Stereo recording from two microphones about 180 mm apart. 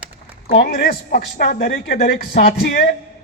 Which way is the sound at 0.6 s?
60° left (ahead or behind).